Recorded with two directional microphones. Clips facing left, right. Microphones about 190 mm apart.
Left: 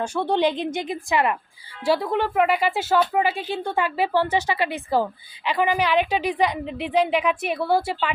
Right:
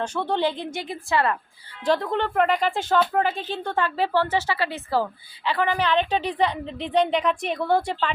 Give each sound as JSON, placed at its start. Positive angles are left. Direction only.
{"t": 0.0, "sound": "speech", "side_deg": 10}